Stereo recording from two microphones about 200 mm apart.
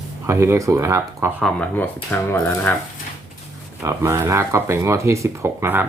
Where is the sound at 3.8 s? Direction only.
15° right (ahead or behind).